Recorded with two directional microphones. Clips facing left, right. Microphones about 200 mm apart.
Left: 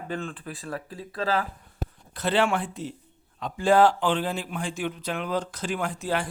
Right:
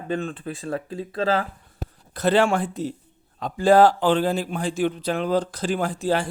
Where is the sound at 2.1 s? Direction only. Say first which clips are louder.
Right 5 dB; 40° right (ahead or behind).